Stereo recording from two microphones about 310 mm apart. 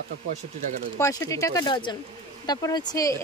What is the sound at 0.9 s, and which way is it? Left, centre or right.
Speech, centre.